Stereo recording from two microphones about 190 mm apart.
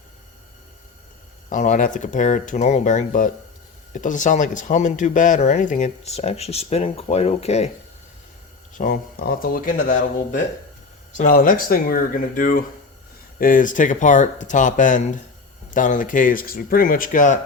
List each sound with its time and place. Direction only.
1.5 s speech: 40° left (ahead or behind)
8.8 s speech: 50° left (ahead or behind)